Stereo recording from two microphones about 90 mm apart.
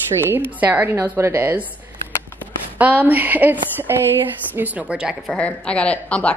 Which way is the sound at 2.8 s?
20° right (ahead or behind).